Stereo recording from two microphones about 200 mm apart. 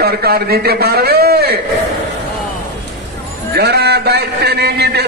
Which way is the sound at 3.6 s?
55° right (ahead or behind).